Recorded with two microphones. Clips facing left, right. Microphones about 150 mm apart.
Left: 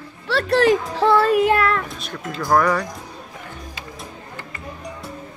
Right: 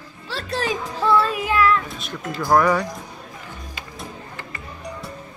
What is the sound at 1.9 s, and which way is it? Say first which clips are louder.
Speech: even; centre (ahead or behind).